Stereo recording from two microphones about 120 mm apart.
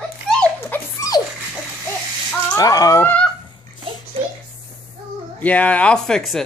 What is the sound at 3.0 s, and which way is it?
Goose, 10° left (ahead or behind).